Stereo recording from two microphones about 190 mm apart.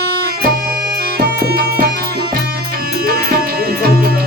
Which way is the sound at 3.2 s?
55° right (ahead or behind).